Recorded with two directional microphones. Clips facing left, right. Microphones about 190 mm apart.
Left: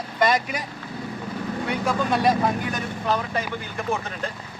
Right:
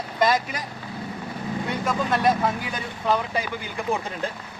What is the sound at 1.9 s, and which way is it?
Speech, centre (ahead or behind).